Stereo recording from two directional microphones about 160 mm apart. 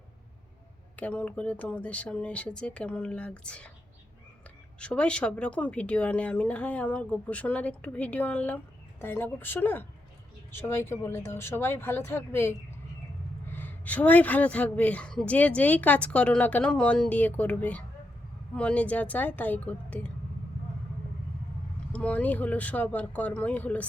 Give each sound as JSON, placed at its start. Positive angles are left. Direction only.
{"t": 0.9, "sound": "speech", "side_deg": 10}
{"t": 4.8, "sound": "speech", "side_deg": 5}
{"t": 21.9, "sound": "speech", "side_deg": 10}